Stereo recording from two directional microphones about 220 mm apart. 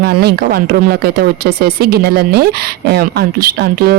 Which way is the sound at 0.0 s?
45° right (ahead or behind).